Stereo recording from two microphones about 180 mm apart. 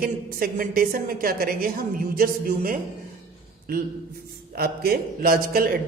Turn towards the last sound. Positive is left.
turn(degrees=-55)  # may be behind; listen again after turning